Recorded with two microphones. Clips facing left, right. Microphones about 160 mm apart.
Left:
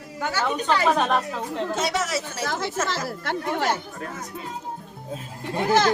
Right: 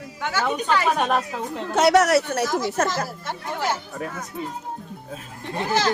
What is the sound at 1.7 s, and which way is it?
Speech, 70° right (ahead or behind).